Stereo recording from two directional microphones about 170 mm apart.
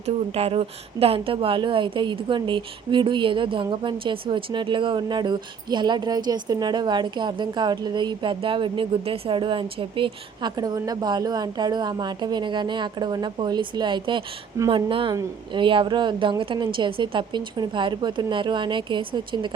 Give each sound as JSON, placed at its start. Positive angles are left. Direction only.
{"t": 0.0, "sound": "speech", "side_deg": -40}